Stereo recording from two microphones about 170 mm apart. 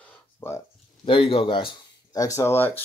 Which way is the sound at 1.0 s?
30° left (ahead or behind).